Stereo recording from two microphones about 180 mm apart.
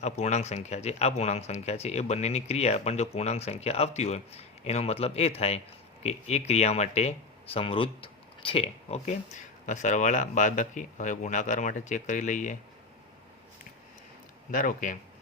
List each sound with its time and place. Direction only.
0.0 s speech: 40° left (ahead or behind)
14.5 s speech: 45° left (ahead or behind)